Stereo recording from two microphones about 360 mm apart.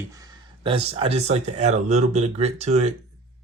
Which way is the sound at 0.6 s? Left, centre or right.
Centre.